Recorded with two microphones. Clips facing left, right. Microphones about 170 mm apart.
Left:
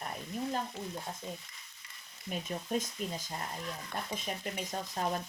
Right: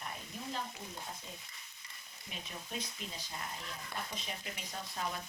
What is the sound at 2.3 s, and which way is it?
Speech, 45° left (ahead or behind).